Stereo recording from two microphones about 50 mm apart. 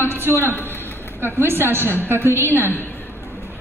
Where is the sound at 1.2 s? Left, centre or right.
Right.